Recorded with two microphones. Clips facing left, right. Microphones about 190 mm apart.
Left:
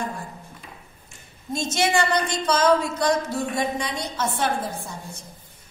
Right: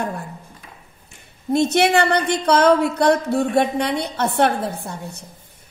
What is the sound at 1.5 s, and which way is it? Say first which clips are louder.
A woman's voice: right 7 dB; 60° right (ahead or behind).